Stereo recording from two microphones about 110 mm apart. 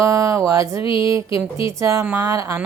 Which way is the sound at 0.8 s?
50° left (ahead or behind).